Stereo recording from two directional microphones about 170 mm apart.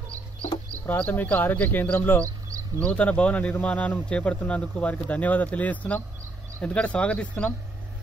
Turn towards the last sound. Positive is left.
turn(degrees=5)  # may be behind; listen again after turning